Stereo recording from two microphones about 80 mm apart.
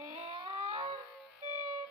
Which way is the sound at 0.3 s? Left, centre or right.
Right.